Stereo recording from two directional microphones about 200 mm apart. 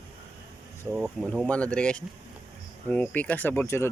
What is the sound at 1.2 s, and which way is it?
Speech, 5° left (ahead or behind).